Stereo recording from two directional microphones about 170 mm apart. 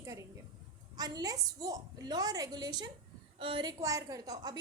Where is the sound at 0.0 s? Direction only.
20° right (ahead or behind).